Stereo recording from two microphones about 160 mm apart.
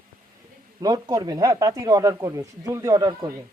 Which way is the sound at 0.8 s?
25° right (ahead or behind).